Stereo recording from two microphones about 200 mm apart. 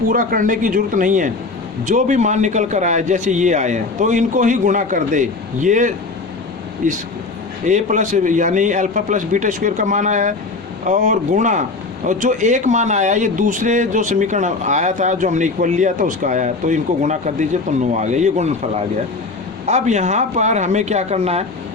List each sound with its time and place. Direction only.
0.1 s speech: 45° right (ahead or behind)
19.6 s speech: 35° right (ahead or behind)